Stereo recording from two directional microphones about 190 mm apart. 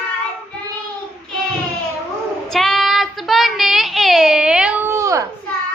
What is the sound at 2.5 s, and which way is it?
Child singing, centre (ahead or behind).